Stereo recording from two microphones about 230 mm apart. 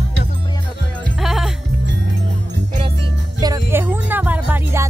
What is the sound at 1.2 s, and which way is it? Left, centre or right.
Music, centre.